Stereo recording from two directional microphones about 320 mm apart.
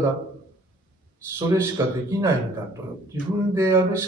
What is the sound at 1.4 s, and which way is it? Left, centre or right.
Speech, centre.